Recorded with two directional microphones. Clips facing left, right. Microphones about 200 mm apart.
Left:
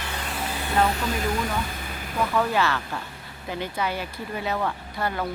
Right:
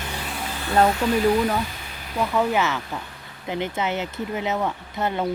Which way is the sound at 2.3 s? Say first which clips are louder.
Right 2 dB; 15° right (ahead or behind).